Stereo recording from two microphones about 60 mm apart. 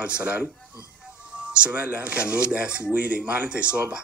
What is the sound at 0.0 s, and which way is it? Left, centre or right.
Speech, right.